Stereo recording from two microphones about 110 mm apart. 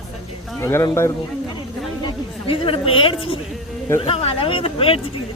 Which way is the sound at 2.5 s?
55° left (ahead or behind).